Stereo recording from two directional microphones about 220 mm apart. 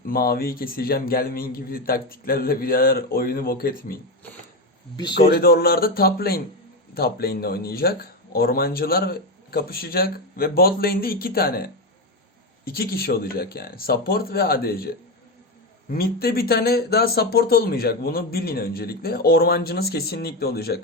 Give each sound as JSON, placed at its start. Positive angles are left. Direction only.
{"t": 0.0, "sound": "speech", "side_deg": 40}
{"t": 5.1, "sound": "speech", "side_deg": 45}